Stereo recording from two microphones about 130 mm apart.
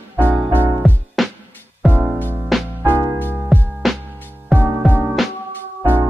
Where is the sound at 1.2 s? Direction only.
Centre (ahead or behind).